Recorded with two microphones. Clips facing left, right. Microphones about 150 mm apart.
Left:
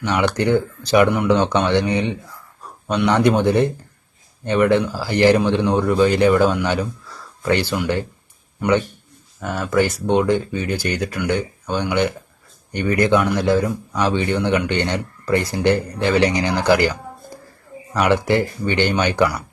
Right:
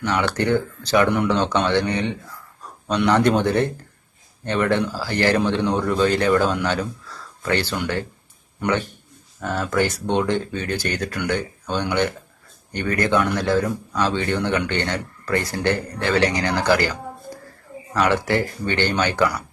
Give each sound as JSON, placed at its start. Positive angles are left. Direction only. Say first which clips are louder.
{"t": 0.0, "sound": "speech", "louder": "left 3 dB", "side_deg": 15}
{"t": 8.6, "sound": "a man's voice", "louder": "left 4 dB", "side_deg": 0}
{"t": 18.0, "sound": "speech", "louder": "left 3 dB", "side_deg": 15}